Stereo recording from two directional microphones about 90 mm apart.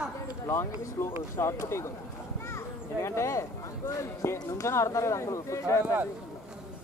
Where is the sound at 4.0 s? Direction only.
30° left (ahead or behind).